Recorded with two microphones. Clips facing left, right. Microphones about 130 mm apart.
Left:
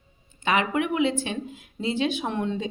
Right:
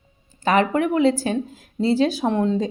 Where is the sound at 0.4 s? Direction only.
40° right (ahead or behind).